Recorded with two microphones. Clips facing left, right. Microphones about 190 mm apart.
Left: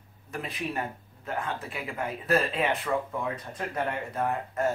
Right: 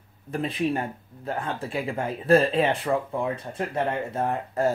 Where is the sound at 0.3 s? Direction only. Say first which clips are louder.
Right 8 dB; 30° right (ahead or behind).